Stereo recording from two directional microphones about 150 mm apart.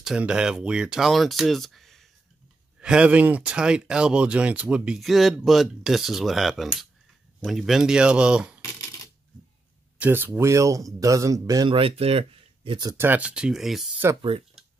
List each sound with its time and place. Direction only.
0.0 s speech: 5° right (ahead or behind)
9.9 s speech: 10° right (ahead or behind)
11.7 s speech: 40° right (ahead or behind)
12.9 s speech: 15° right (ahead or behind)